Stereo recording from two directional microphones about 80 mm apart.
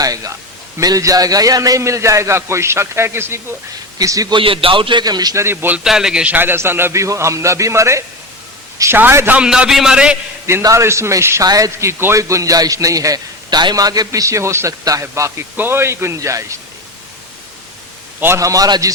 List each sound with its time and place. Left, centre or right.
0.0 s a man's voice: right
3.9 s a man's voice: right
4.3 s a man's voice: right
5.0 s a man's voice: right
5.4 s a man's voice: right
5.8 s a man's voice: centre
6.3 s a man's voice: right
9.0 s a man's voice: right
9.4 s a man's voice: centre
10.6 s a man's voice: right
11.4 s a man's voice: right
14.7 s a man's voice: right
15.0 s a man's voice: right
18.3 s a man's voice: right